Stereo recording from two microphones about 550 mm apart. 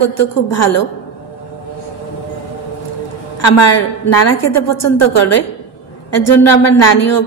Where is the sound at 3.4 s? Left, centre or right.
Left.